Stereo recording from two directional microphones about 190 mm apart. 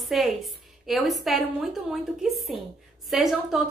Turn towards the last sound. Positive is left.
turn(degrees=0)  # may be behind; listen again after turning